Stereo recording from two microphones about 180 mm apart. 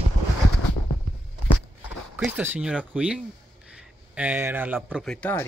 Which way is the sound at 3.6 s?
5° right (ahead or behind).